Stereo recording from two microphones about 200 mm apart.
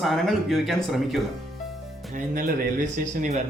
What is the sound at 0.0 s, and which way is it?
Speech, centre (ahead or behind).